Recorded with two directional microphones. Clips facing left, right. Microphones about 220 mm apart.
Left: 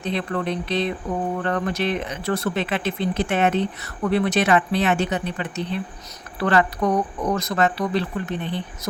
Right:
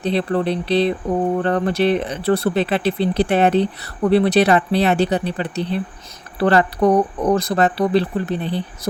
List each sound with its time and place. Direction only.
0.0 s speech: 35° right (ahead or behind)